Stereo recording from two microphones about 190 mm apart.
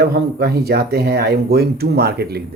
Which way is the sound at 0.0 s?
55° right (ahead or behind).